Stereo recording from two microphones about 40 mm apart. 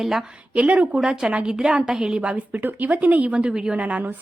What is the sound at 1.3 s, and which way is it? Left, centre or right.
Speech, right.